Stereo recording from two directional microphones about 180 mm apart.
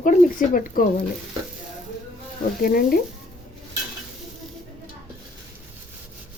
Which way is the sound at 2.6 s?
55° left (ahead or behind).